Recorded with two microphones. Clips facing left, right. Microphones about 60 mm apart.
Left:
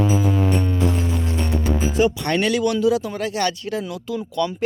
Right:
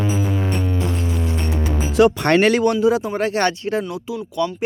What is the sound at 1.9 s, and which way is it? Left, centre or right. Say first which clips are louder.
Speech: right 7 dB; right.